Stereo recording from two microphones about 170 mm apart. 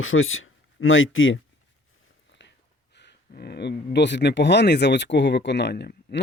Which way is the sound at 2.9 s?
80° left.